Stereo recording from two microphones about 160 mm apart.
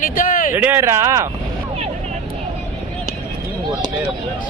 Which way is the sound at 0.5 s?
10° right (ahead or behind).